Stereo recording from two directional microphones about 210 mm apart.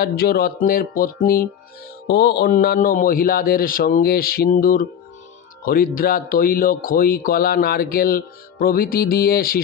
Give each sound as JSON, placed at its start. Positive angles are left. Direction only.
{"t": 0.0, "sound": "speech", "side_deg": 45}